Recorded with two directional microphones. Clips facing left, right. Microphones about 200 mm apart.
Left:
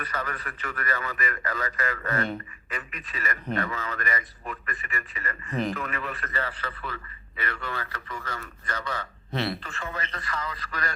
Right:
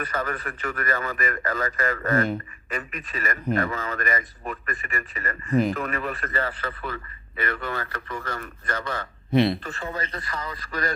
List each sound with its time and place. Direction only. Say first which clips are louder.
0.0 s a man's voice: right 5 dB; 45° right (ahead or behind)
9.3 s speech: right 9 dB; 15° right (ahead or behind)
9.6 s speech: right 4 dB; 35° right (ahead or behind)